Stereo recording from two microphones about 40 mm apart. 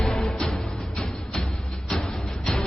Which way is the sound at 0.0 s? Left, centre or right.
Centre.